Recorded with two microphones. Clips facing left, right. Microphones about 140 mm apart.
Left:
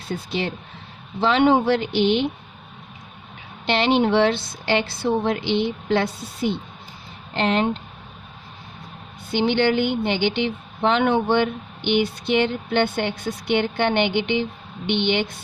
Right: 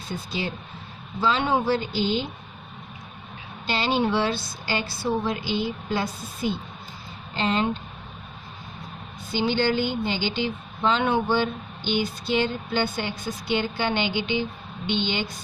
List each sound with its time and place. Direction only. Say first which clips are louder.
0.3 s a woman's voice: left 4 dB; 65° left (ahead or behind)
3.7 s a woman's voice: left 5 dB; 65° left (ahead or behind)
9.3 s speech: left 4 dB; 65° left (ahead or behind)